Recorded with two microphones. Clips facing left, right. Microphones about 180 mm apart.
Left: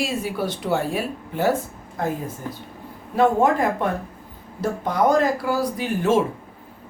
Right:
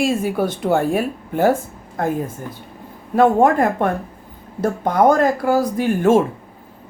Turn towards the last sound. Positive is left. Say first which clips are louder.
# right 5 dB
turn(degrees=-50)  # may be behind; listen again after turning